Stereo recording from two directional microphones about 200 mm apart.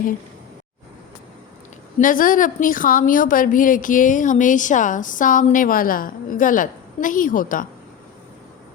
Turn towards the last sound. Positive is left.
turn(degrees=40)  # may be behind; listen again after turning